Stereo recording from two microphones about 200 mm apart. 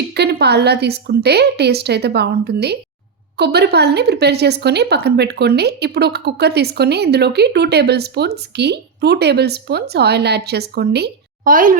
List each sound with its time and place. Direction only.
0.1 s speech: 55° right (ahead or behind)